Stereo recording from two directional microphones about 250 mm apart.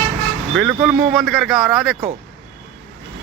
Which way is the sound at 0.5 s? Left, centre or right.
Centre.